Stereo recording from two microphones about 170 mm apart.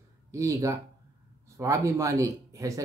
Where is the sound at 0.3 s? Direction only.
20° right (ahead or behind).